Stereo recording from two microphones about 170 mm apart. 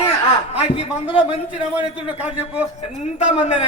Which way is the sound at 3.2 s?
40° left (ahead or behind).